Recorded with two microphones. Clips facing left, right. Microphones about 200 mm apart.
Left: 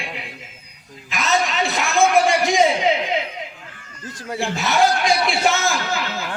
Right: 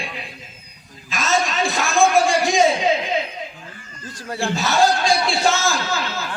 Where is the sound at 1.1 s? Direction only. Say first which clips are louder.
Even; 20° left (ahead or behind).